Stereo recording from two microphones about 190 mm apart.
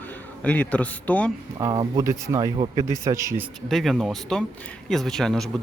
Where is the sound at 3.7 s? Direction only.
Centre (ahead or behind).